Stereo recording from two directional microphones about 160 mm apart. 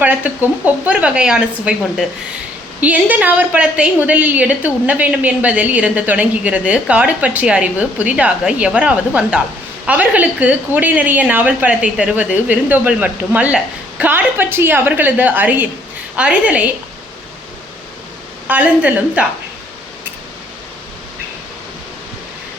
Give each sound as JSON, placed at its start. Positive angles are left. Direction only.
{"t": 0.0, "sound": "a woman's voice", "side_deg": -10}
{"t": 18.4, "sound": "a woman's voice", "side_deg": -10}